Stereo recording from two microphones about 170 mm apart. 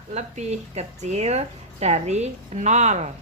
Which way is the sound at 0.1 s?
40° right (ahead or behind).